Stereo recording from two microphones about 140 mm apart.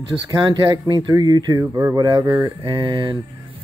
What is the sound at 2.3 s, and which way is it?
Speech, 35° right (ahead or behind).